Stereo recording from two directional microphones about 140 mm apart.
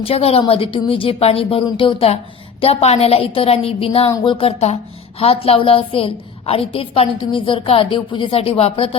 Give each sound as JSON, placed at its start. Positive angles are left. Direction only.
{"t": 0.0, "sound": "a woman's voice", "side_deg": 45}